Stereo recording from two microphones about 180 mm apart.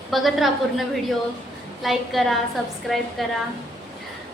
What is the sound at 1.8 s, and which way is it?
A woman's voice, centre (ahead or behind).